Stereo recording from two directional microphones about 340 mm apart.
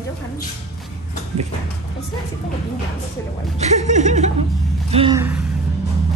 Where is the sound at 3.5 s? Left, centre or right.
Centre.